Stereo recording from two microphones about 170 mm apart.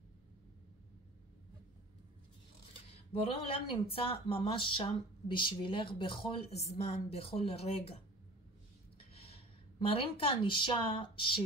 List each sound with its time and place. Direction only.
3.1 s speech: 35° left (ahead or behind)
8.9 s speech: 35° left (ahead or behind)